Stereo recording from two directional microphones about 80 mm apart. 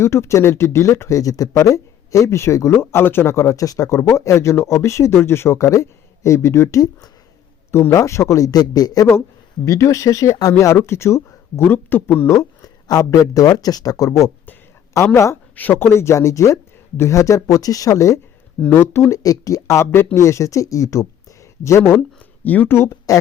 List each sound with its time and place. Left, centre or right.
0.0 s speech: left
7.7 s a man's voice: left
9.6 s speech: left
12.3 s speech: left
15.5 s speech: left
18.6 s speech: left
19.1 s speech: left
22.4 s speech: left